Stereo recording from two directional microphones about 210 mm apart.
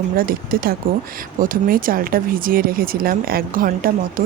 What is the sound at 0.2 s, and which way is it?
Speech, 45° right (ahead or behind).